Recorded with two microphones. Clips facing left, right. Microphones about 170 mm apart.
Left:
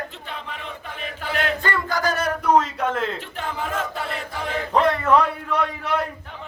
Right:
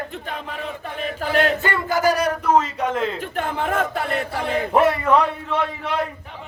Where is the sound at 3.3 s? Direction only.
55° right (ahead or behind).